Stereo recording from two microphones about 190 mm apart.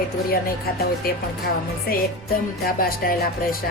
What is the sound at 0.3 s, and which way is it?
Music, 55° left (ahead or behind).